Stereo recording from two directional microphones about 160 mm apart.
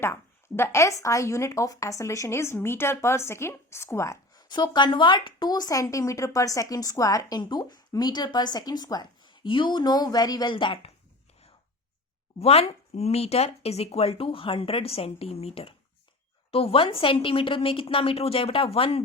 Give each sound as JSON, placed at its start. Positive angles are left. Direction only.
{"t": 0.0, "sound": "speech", "side_deg": 15}
{"t": 12.4, "sound": "speech", "side_deg": 40}